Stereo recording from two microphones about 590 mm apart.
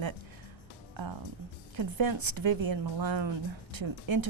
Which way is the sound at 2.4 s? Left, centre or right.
Right.